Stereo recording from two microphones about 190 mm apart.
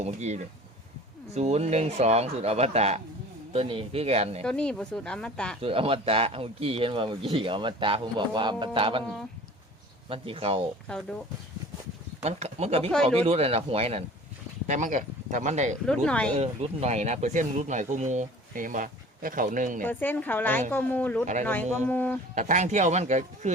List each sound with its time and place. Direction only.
0.0 s speech: 35° right (ahead or behind)
4.4 s speech: 5° left (ahead or behind)
5.6 s speech: 30° right (ahead or behind)
10.1 s speech: 30° right (ahead or behind)
12.2 s speech: 35° right (ahead or behind)
16.0 s speech: 5° left (ahead or behind)
16.3 s speech: 35° right (ahead or behind)
19.8 s speech: 10° left (ahead or behind)
22.4 s speech: 40° right (ahead or behind)